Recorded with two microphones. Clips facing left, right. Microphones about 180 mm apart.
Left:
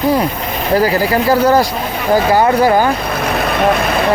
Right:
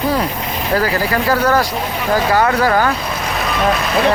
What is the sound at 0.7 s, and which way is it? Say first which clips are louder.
Speech: left 4 dB; 15° left (ahead or behind).